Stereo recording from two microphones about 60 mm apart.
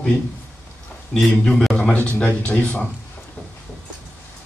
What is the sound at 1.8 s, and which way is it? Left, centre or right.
Speech, left.